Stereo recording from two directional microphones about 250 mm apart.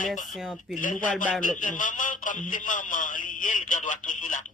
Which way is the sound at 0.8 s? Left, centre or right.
Left.